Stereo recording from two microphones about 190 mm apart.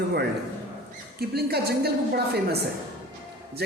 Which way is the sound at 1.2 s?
55° right (ahead or behind).